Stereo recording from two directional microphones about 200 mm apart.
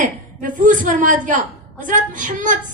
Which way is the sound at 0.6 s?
40° right (ahead or behind).